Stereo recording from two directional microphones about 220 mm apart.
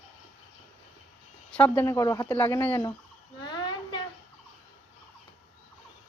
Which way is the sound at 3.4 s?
20° left (ahead or behind).